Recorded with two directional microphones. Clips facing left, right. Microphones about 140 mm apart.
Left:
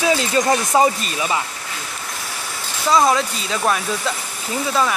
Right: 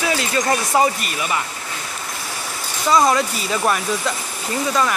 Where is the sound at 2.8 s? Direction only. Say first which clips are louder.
Even; centre (ahead or behind).